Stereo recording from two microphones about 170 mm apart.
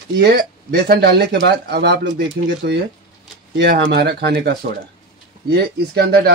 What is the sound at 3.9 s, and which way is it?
Speech, 80° right.